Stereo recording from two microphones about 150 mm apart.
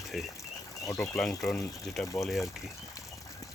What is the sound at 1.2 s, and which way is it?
Speech, centre (ahead or behind).